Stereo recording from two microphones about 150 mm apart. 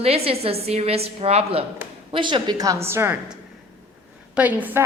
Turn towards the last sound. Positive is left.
turn(degrees=-10)  # may be behind; listen again after turning